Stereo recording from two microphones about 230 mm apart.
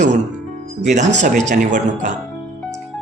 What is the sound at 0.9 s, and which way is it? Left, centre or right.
Speech, right.